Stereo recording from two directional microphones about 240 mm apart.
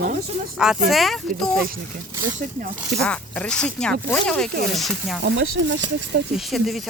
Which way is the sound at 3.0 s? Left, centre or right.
Centre.